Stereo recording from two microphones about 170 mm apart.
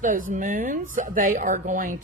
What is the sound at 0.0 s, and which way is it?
Speech, 50° right (ahead or behind).